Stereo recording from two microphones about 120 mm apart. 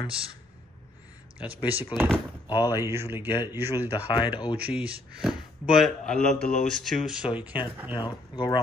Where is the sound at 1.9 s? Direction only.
35° left (ahead or behind).